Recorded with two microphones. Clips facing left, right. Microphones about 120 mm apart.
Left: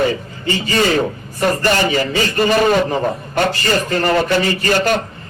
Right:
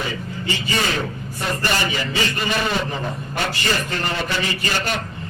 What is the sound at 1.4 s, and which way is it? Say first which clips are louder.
A man's voice: left 8 dB; 45° left (ahead or behind).